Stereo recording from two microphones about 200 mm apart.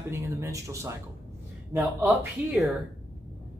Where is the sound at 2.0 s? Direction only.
10° right (ahead or behind).